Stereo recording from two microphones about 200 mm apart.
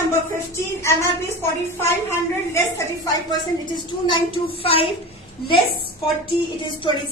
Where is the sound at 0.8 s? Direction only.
15° left (ahead or behind).